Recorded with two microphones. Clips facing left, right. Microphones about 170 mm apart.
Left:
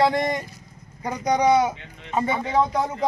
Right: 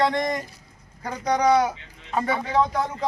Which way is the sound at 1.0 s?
15° left (ahead or behind).